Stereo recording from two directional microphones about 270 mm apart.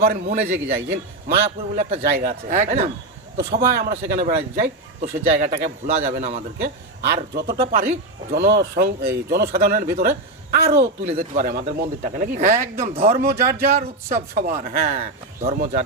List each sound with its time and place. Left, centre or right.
0.0 s a man's voice: right